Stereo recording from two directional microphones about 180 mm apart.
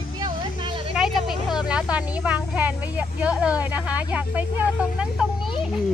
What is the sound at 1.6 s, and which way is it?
A woman's voice, 5° right (ahead or behind).